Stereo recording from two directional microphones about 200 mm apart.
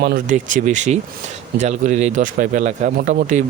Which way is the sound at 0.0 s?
45° right (ahead or behind).